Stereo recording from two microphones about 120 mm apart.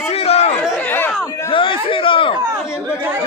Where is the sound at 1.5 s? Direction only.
45° left (ahead or behind).